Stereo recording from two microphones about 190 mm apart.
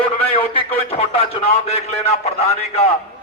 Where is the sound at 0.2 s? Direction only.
30° left (ahead or behind).